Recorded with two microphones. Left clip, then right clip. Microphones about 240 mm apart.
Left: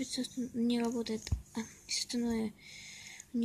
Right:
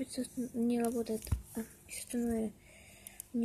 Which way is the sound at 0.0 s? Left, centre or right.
Centre.